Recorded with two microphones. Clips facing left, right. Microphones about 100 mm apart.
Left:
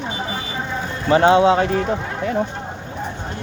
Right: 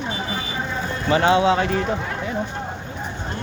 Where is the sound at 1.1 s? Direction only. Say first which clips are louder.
Left 4 dB; 40° left (ahead or behind).